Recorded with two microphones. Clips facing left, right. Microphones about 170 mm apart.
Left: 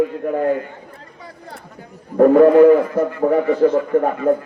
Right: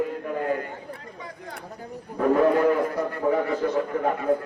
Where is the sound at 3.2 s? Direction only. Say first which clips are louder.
Left 6 dB; 45° left (ahead or behind).